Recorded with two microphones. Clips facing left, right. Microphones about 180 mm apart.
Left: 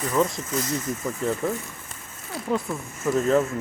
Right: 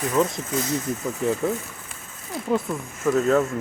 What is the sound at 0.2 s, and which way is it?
Speech, centre (ahead or behind).